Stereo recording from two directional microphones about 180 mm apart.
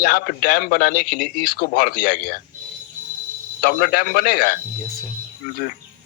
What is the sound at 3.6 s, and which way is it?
Speech, 55° left (ahead or behind).